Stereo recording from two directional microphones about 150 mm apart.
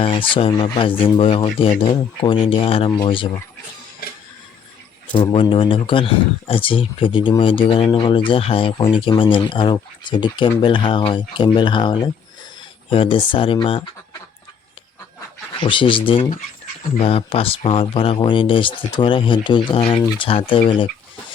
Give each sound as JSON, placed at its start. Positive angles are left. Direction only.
{"t": 0.0, "sound": "speech", "side_deg": 35}
{"t": 5.2, "sound": "speech", "side_deg": 35}
{"t": 15.6, "sound": "speech", "side_deg": 35}